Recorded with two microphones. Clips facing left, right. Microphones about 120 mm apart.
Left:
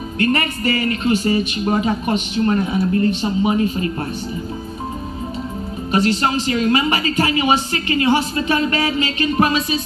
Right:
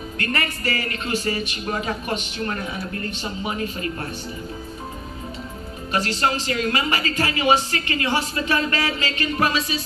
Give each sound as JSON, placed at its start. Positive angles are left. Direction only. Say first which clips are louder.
{"t": 0.2, "sound": "speech", "louder": "left 8 dB", "side_deg": 25}
{"t": 5.9, "sound": "speech", "louder": "left 5 dB", "side_deg": 20}